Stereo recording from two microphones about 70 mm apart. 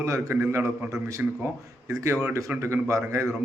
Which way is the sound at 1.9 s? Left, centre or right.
Right.